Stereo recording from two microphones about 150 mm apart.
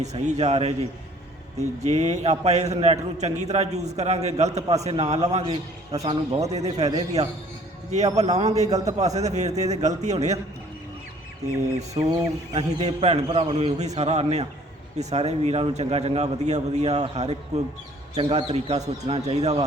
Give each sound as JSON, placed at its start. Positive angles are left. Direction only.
{"t": 0.0, "sound": "a man's voice", "side_deg": -50}
{"t": 5.4, "sound": "a man's voice", "side_deg": -30}
{"t": 6.0, "sound": "a man's voice", "side_deg": -45}
{"t": 12.0, "sound": "bird", "side_deg": -40}
{"t": 12.5, "sound": "a man's voice", "side_deg": -45}